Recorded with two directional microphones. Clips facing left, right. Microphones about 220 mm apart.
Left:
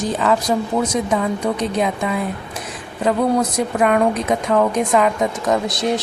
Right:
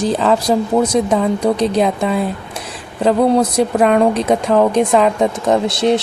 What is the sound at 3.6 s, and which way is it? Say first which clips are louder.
Speech: right 4 dB; 30° right (ahead or behind).